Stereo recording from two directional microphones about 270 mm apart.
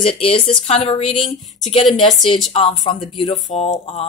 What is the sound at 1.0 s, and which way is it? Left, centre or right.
Speech, centre.